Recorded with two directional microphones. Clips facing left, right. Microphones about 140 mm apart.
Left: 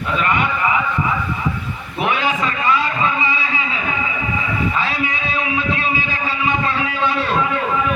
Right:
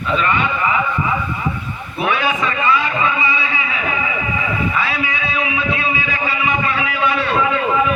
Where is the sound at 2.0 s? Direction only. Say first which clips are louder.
Right 1 dB; 20° left (ahead or behind).